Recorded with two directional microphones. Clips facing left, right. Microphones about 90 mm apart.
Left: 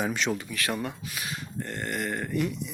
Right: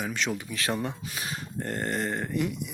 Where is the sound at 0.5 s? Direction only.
25° right (ahead or behind).